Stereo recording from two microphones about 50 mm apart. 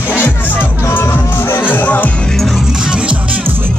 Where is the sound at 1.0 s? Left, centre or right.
Left.